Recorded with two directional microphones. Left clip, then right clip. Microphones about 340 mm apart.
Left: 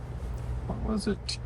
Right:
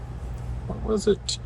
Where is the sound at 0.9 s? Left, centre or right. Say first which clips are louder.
Right 11 dB; centre.